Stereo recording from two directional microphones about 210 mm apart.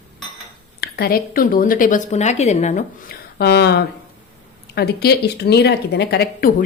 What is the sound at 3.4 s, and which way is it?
Speech, 50° left (ahead or behind).